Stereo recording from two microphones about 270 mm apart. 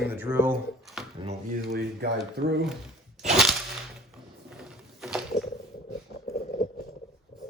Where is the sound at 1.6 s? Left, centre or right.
Right.